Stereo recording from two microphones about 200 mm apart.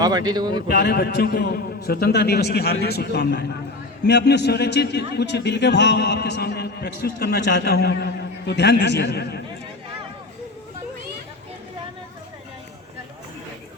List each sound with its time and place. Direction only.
0.0 s speech: 20° right (ahead or behind)
0.7 s a man's voice: 55° left (ahead or behind)